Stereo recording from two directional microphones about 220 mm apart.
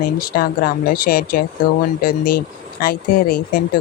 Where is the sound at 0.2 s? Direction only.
40° left (ahead or behind).